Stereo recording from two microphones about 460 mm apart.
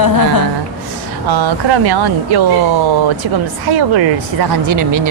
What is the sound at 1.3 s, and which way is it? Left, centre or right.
Speech, right.